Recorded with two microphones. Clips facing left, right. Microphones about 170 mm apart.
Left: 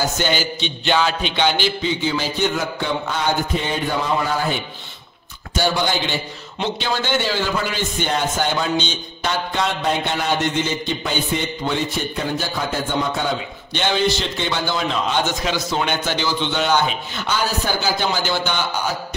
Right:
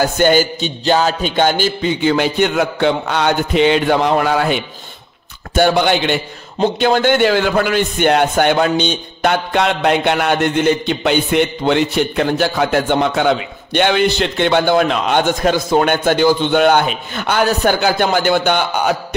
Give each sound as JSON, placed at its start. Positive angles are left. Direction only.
{"t": 0.0, "sound": "a man's voice", "side_deg": -50}